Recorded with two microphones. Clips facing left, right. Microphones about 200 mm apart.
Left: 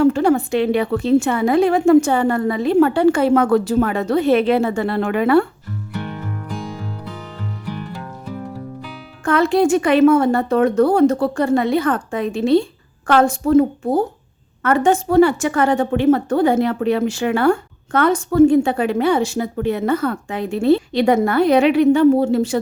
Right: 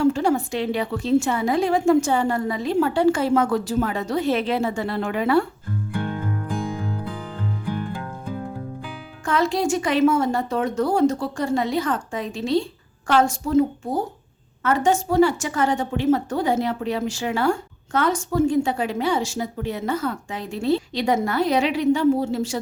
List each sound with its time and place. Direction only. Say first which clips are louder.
0.0 s a woman's voice: left 5 dB; 60° left (ahead or behind)
9.2 s a woman's voice: left 6 dB; 60° left (ahead or behind)